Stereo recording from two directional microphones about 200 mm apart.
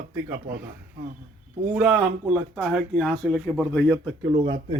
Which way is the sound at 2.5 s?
5° right (ahead or behind).